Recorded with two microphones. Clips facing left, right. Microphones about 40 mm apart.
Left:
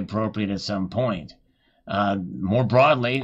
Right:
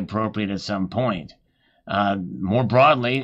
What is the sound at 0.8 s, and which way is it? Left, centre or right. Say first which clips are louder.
Speech: right 2 dB; right.